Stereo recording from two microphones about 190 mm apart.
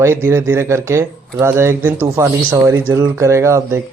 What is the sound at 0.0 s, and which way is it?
A man's voice, 15° right (ahead or behind).